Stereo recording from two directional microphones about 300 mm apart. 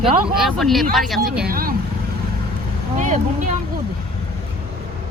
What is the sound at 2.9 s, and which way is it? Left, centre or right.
Speech, right.